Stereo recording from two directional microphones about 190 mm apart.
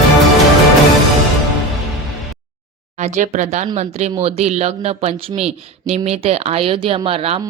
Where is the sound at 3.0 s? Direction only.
40° right (ahead or behind).